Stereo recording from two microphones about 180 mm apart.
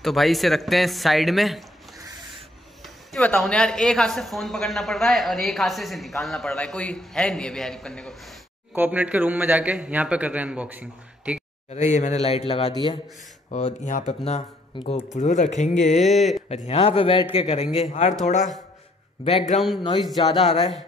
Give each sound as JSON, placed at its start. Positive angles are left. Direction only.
{"t": 0.0, "sound": "speech", "side_deg": 0}
{"t": 2.8, "sound": "speech", "side_deg": 5}
{"t": 8.7, "sound": "a man's voice", "side_deg": -10}
{"t": 11.7, "sound": "speech", "side_deg": 40}
{"t": 16.1, "sound": "speech", "side_deg": 0}
{"t": 16.4, "sound": "speech", "side_deg": 35}
{"t": 19.2, "sound": "speech", "side_deg": 35}